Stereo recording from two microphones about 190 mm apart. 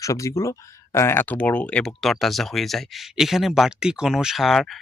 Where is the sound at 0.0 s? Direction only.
15° left (ahead or behind).